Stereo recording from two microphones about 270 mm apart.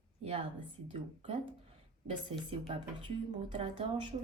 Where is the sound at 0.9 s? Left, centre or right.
Right.